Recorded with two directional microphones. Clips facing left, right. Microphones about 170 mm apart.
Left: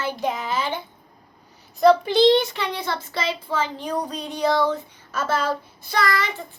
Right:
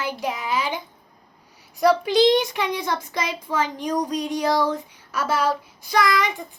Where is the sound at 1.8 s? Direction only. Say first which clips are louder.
Left 2 dB; 10° right (ahead or behind).